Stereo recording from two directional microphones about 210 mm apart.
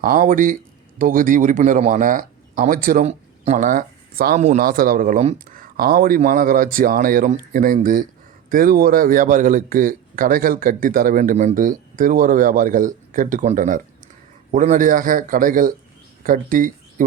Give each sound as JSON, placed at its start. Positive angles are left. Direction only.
{"t": 0.0, "sound": "speech", "side_deg": -40}